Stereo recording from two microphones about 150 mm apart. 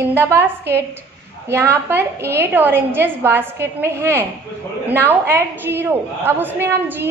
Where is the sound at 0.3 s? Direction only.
15° right (ahead or behind).